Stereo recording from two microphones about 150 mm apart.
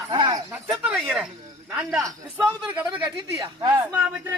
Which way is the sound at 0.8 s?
10° right (ahead or behind).